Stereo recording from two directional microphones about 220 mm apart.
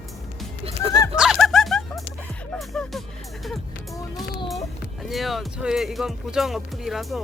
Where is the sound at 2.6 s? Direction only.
Centre (ahead or behind).